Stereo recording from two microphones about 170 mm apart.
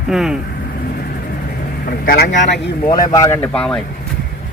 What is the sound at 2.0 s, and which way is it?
Speech, 65° left (ahead or behind).